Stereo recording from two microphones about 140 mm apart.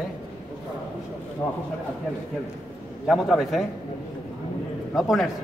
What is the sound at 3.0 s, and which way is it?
Speech, centre (ahead or behind).